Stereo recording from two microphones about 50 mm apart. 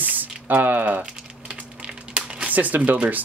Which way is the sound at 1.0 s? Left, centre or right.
Right.